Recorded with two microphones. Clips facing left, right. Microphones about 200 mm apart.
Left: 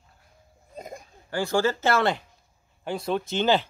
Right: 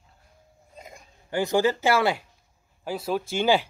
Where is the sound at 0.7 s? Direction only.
40° left (ahead or behind).